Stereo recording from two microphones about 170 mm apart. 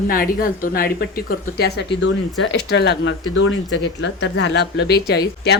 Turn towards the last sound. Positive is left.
turn(degrees=70)  # may be behind; listen again after turning